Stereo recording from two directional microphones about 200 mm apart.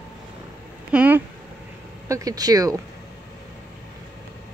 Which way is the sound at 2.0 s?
15° right (ahead or behind).